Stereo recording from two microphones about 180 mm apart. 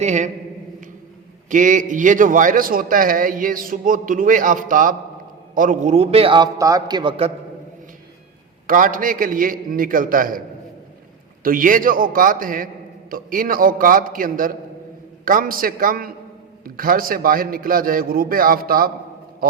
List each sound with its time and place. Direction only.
0.0 s a man's voice: 40° right (ahead or behind)
1.5 s a man's voice: 45° right (ahead or behind)
8.6 s a man's voice: 50° right (ahead or behind)
11.4 s a man's voice: 50° right (ahead or behind)
19.4 s a sound: 55° right (ahead or behind)